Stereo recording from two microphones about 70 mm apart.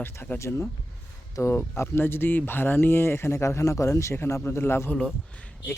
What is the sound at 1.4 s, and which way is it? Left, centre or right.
Speech, left.